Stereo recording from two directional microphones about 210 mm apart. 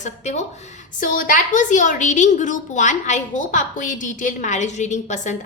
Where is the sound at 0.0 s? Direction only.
30° left (ahead or behind).